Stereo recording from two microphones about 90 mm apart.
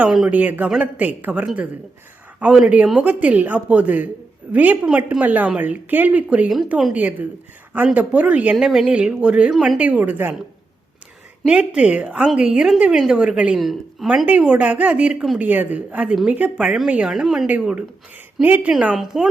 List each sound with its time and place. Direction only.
0.3 s a woman's voice: 20° right (ahead or behind)
8.5 s a woman's voice: 5° right (ahead or behind); by 10.3 s 20° right (ahead or behind)
11.4 s a woman's voice: 10° right (ahead or behind)
13.6 s a woman's voice: centre (ahead or behind)
14.3 s a woman's voice: 15° right (ahead or behind)
18.9 s a woman's voice: 5° right (ahead or behind)